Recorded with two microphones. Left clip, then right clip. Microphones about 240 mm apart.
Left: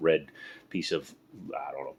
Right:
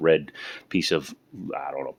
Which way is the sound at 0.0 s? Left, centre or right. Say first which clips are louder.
Right 5 dB; right.